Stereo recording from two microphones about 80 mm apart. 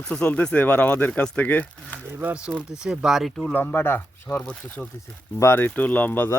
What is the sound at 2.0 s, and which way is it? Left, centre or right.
Speech, right.